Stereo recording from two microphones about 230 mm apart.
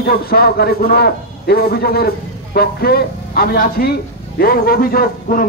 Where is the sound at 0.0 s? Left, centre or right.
Left.